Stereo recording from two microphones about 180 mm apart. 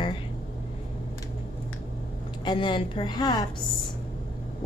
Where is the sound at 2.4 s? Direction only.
25° left (ahead or behind).